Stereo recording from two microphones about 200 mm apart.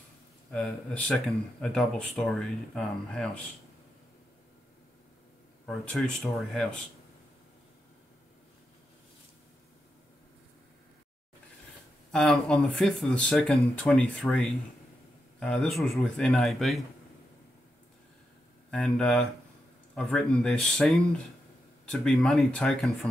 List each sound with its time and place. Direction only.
0.5 s speech: 5° left (ahead or behind)
5.7 s speech: 5° left (ahead or behind)
12.1 s a man's voice: 5° left (ahead or behind)
18.7 s speech: 5° left (ahead or behind)